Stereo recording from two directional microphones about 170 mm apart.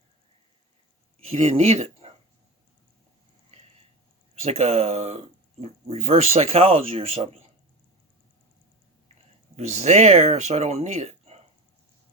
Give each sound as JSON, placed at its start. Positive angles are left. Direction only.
{"t": 1.3, "sound": "speech", "side_deg": -40}
{"t": 4.4, "sound": "speech", "side_deg": -40}
{"t": 9.6, "sound": "speech", "side_deg": -40}